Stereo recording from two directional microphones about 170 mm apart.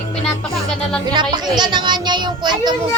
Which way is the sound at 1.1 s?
25° right (ahead or behind).